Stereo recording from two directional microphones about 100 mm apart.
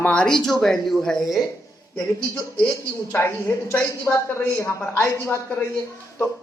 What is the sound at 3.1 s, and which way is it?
A woman's voice, 25° left (ahead or behind).